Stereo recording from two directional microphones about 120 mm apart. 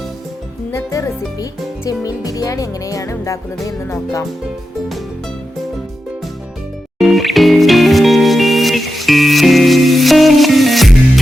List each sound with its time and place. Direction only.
0.7 s speech: 25° left (ahead or behind)
7.0 s music: centre (ahead or behind)